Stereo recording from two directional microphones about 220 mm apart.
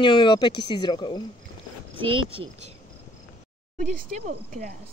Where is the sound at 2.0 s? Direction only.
25° right (ahead or behind).